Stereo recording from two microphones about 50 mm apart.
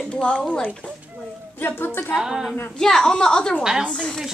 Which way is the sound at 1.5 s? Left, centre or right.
Left.